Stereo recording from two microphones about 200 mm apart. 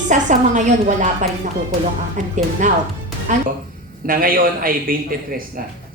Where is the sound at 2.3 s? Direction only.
40° right (ahead or behind).